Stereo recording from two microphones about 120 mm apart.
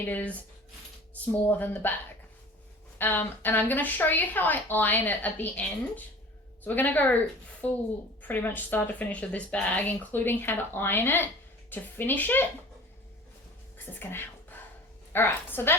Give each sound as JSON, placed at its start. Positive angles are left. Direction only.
{"t": 0.0, "sound": "a woman's voice", "side_deg": 15}
{"t": 3.0, "sound": "a woman's voice", "side_deg": 15}
{"t": 8.3, "sound": "a woman's voice", "side_deg": 15}
{"t": 14.0, "sound": "a sound", "side_deg": 20}
{"t": 15.1, "sound": "a woman's voice", "side_deg": 20}